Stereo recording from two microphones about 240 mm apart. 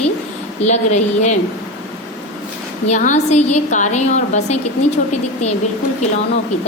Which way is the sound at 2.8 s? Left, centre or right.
Left.